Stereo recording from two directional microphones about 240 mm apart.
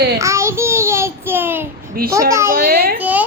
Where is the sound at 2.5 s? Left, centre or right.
Right.